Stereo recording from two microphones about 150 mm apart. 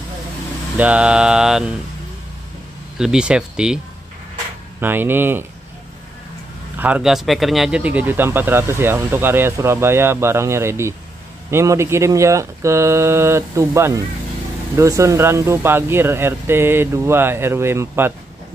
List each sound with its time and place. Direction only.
0.7 s music: 10° right (ahead or behind)
3.0 s music: 5° right (ahead or behind)
4.7 s speech: 15° right (ahead or behind)
6.8 s speech: 5° right (ahead or behind)